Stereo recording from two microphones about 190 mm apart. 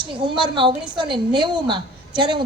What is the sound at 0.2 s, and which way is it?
A woman's voice, 25° right (ahead or behind).